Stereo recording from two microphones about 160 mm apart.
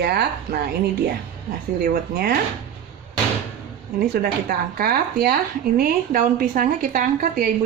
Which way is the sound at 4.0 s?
75° right (ahead or behind).